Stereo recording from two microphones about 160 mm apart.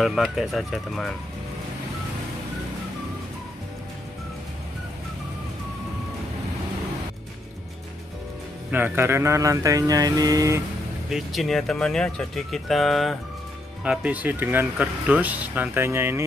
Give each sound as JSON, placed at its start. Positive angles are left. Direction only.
{"t": 0.0, "sound": "speech", "side_deg": 0}
{"t": 8.7, "sound": "speech", "side_deg": -15}
{"t": 11.1, "sound": "speech", "side_deg": 0}